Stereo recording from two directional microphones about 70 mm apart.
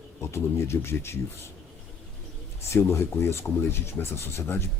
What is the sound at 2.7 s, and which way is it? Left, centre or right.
Speech, left.